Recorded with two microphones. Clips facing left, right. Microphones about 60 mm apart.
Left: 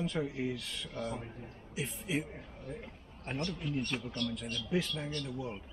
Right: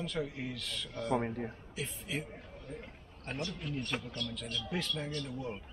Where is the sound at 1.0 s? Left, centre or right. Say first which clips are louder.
Right 8 dB; right.